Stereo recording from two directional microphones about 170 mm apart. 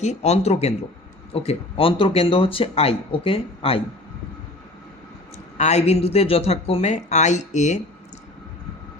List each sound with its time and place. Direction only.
0.0 s speech: 40° left (ahead or behind)
5.5 s speech: 40° left (ahead or behind)